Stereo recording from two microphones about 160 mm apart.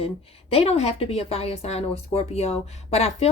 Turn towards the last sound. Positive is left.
turn(degrees=40)  # may be behind; listen again after turning